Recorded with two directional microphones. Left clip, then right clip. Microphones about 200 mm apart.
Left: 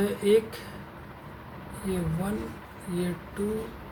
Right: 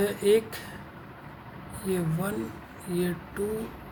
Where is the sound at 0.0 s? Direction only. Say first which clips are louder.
Even; 45° right (ahead or behind).